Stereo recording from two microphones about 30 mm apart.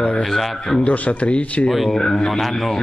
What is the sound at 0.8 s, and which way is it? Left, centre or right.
Speech, left.